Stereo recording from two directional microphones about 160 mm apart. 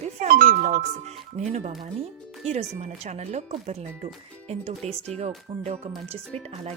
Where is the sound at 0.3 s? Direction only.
60° right (ahead or behind); by 5.9 s 45° right (ahead or behind).